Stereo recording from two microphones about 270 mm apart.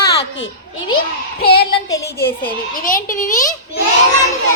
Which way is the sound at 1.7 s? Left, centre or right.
Centre.